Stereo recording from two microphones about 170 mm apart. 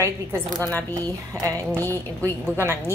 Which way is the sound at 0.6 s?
10° left (ahead or behind).